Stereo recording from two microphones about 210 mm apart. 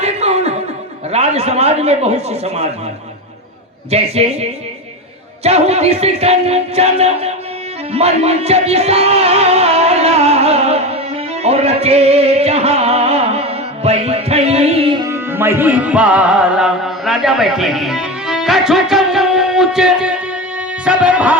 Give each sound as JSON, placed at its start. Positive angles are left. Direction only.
{"t": 0.0, "sound": "chuckle", "side_deg": -30}
{"t": 1.1, "sound": "speech", "side_deg": -30}
{"t": 3.9, "sound": "a man's voice", "side_deg": -30}
{"t": 7.9, "sound": "music", "side_deg": -30}
{"t": 20.8, "sound": "speech", "side_deg": -5}